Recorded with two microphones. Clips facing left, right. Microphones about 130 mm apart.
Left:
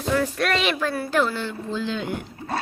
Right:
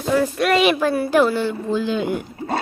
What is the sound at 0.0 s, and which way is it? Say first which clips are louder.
Speech: right 4 dB; 5° right (ahead or behind).